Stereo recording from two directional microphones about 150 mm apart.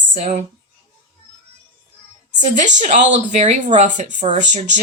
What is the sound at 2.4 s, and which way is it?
Speech, 55° right (ahead or behind).